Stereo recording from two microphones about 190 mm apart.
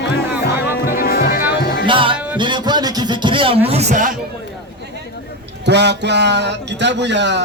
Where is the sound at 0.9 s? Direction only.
50° left (ahead or behind).